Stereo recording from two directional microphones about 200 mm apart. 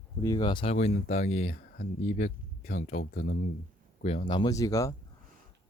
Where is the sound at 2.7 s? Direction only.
35° left (ahead or behind).